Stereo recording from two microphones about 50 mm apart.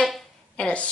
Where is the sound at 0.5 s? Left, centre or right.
Left.